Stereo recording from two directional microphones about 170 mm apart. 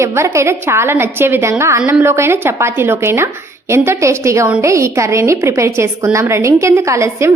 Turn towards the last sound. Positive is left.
turn(degrees=-15)  # may be behind; listen again after turning